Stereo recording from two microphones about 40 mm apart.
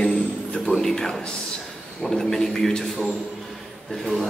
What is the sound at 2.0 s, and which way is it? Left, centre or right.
Speech, centre.